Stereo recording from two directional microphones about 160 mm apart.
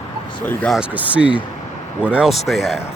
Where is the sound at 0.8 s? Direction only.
10° right (ahead or behind).